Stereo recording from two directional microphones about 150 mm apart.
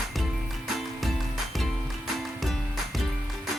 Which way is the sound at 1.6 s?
Centre (ahead or behind).